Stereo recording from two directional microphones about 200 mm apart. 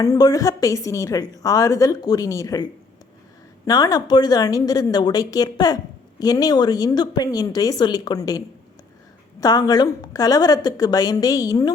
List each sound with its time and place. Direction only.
0.0 s a woman's voice: 15° left (ahead or behind)
3.7 s a woman's voice: 20° left (ahead or behind)